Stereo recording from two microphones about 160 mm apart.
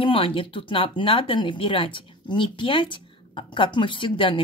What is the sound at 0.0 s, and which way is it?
Speech, 35° left (ahead or behind).